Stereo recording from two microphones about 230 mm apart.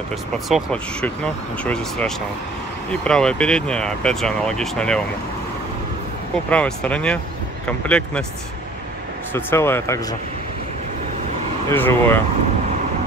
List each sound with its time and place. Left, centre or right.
0.5 s speech: centre
6.5 s speech: centre
9.3 s speech: centre
11.7 s speech: centre